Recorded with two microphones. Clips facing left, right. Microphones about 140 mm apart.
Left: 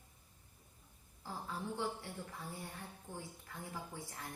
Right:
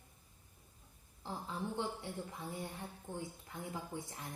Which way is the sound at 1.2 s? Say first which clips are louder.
Right 2 dB; 20° right (ahead or behind).